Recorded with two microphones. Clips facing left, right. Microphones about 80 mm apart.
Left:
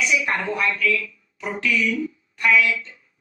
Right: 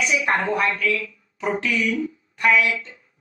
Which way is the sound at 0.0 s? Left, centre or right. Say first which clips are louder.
Right 1 dB; right.